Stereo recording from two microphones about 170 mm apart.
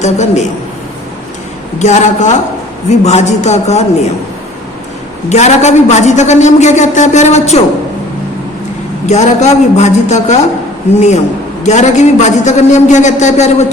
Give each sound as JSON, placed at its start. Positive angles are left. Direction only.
{"t": 0.0, "sound": "a man's voice", "side_deg": 40}
{"t": 1.8, "sound": "a man's voice", "side_deg": 45}
{"t": 5.3, "sound": "a man's voice", "side_deg": 40}
{"t": 9.0, "sound": "a man's voice", "side_deg": 40}
{"t": 11.6, "sound": "a man's voice", "side_deg": 45}